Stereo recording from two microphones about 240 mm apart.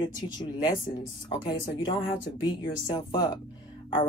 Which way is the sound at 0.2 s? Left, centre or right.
Centre.